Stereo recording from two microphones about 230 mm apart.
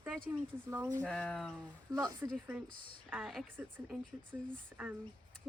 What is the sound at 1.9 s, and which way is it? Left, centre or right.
Speech, centre.